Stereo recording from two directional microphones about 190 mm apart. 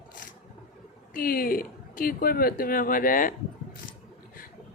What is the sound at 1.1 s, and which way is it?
A woman's voice, 50° left (ahead or behind).